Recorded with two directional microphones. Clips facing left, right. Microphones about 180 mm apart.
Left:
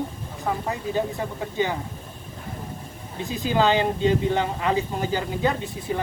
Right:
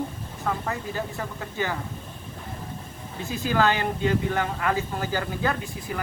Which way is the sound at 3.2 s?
15° left (ahead or behind).